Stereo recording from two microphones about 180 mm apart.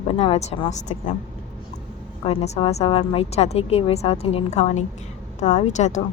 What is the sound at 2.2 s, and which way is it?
Speech, 35° left (ahead or behind).